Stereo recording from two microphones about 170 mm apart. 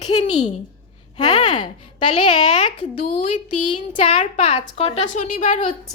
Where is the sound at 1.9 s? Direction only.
45° left (ahead or behind).